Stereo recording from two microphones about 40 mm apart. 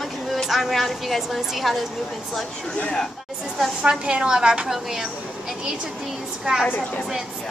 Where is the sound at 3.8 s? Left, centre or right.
Right.